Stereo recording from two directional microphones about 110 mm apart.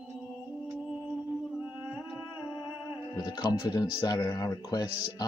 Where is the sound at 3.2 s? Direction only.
35° left (ahead or behind).